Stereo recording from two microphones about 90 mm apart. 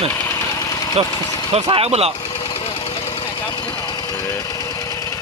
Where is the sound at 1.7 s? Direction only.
90° right.